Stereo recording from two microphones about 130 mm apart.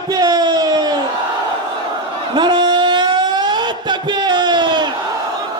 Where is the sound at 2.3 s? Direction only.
35° right (ahead or behind).